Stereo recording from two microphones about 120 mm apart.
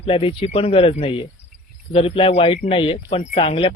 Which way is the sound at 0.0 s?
50° left (ahead or behind).